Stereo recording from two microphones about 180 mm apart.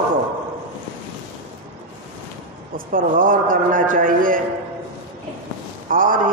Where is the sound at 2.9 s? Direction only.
50° right (ahead or behind).